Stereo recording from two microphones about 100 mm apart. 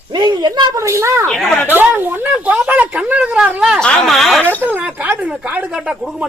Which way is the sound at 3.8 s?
10° left (ahead or behind).